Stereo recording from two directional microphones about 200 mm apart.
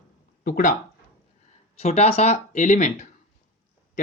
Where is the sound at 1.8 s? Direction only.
35° left (ahead or behind).